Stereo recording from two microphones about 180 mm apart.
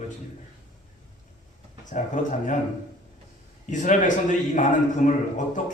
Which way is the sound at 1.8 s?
45° left (ahead or behind).